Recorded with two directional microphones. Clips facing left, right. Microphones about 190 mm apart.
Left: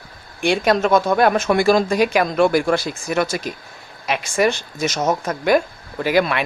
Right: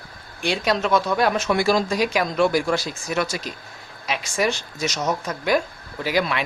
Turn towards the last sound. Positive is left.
turn(degrees=55)  # may be behind; listen again after turning